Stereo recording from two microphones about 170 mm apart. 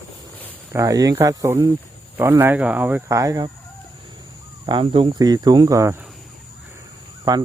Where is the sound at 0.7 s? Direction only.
20° right (ahead or behind).